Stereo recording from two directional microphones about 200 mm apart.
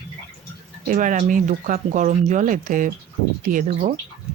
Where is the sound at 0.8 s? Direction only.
40° right (ahead or behind).